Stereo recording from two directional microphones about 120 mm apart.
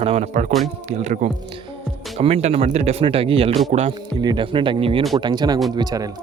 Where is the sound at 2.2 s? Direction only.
55° right (ahead or behind).